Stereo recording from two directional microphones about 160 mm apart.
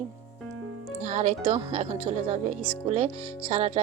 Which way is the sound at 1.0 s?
45° right (ahead or behind).